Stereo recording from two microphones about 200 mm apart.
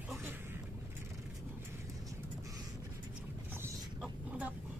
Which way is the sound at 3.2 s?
10° right (ahead or behind).